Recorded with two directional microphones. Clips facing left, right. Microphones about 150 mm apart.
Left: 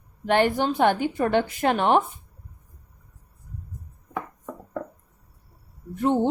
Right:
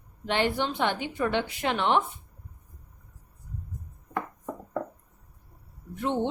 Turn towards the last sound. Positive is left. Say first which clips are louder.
# left 6 dB
turn(degrees=40)  # may be behind; listen again after turning